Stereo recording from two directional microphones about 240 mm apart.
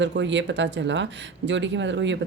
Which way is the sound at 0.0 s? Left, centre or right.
Right.